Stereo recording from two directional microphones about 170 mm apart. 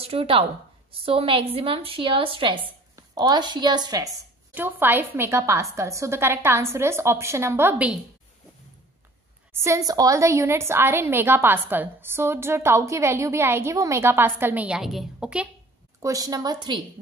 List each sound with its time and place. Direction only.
0.0 s a woman's voice: 35° right (ahead or behind)
4.6 s a woman's voice: 10° right (ahead or behind)
9.5 s a woman's voice: 15° right (ahead or behind)
16.0 s a woman's voice: 20° right (ahead or behind)